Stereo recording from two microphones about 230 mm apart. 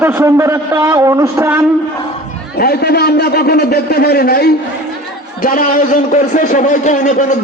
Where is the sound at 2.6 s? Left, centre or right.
Left.